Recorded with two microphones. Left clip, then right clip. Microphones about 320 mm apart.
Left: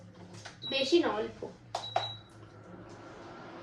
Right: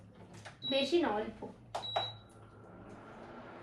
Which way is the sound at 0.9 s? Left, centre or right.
Left.